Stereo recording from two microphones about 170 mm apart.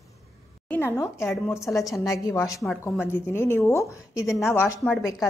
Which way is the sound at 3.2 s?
15° left (ahead or behind).